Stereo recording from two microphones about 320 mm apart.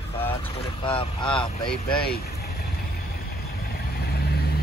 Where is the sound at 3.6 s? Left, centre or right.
Left.